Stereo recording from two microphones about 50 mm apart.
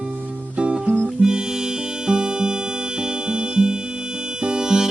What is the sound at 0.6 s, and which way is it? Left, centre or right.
Music, right.